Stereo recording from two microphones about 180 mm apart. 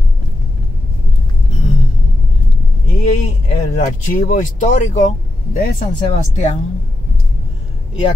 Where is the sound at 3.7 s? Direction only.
40° left (ahead or behind).